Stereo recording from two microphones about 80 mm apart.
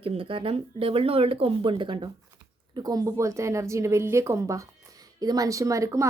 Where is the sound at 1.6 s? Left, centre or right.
Right.